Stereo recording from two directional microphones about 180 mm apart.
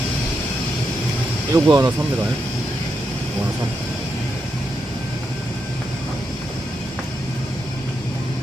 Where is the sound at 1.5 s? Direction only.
20° right (ahead or behind).